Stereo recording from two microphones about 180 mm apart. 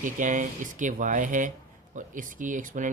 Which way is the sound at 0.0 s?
45° right (ahead or behind).